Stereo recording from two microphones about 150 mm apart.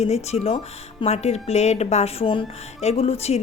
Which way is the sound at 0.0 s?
45° left (ahead or behind).